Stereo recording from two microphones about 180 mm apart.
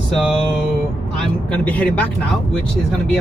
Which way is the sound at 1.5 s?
5° left (ahead or behind).